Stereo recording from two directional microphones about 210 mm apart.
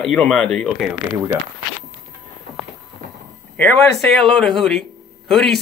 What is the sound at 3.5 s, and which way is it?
Speech, 5° left (ahead or behind).